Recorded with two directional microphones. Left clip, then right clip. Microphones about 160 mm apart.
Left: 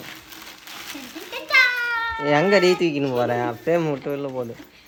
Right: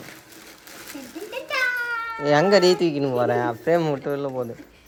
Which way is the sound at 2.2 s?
5° left (ahead or behind).